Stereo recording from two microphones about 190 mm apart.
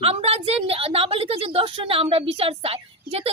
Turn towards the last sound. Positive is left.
turn(degrees=-30)  # may be behind; listen again after turning